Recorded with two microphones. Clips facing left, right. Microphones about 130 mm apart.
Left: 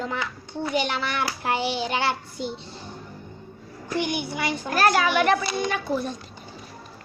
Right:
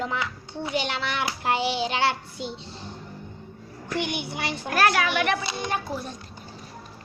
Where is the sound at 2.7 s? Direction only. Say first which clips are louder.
Even; 10° left (ahead or behind).